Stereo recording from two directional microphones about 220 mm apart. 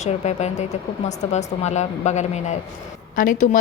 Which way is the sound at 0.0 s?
30° left (ahead or behind).